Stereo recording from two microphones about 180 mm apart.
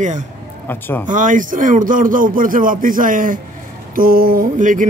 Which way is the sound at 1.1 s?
45° right (ahead or behind).